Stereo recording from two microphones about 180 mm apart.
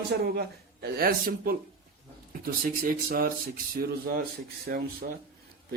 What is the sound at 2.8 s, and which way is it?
A man's voice, 55° right (ahead or behind).